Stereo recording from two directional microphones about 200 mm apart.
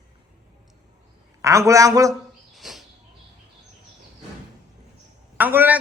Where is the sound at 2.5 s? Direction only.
Centre (ahead or behind).